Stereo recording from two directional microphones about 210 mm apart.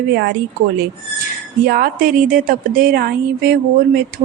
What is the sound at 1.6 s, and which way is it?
A woman's voice, 45° right (ahead or behind).